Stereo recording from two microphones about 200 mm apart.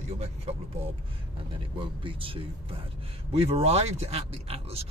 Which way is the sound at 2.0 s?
25° right (ahead or behind).